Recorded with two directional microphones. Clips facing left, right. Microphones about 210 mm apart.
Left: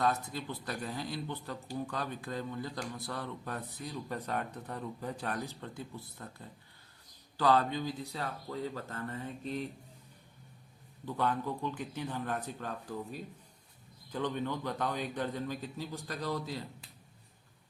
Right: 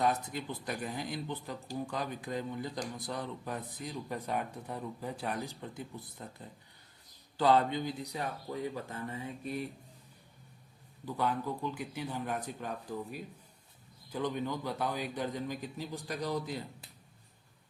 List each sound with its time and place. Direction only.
0.0 s speech: 15° right (ahead or behind)
7.3 s speech: 25° right (ahead or behind)
11.0 s speech: 10° right (ahead or behind)